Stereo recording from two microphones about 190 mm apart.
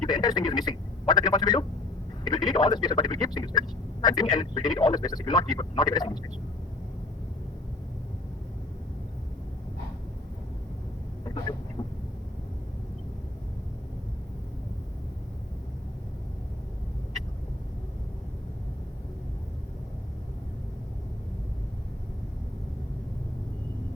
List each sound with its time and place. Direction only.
0.1 s speech: 20° left (ahead or behind)
11.8 s vehicle: 20° left (ahead or behind)